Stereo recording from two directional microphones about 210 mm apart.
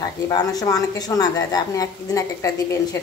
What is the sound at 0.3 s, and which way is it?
A woman's voice, 15° left (ahead or behind).